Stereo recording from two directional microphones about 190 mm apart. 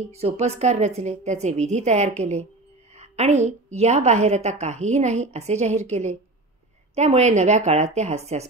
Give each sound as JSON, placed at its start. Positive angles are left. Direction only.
{"t": 0.1, "sound": "a woman's voice", "side_deg": -35}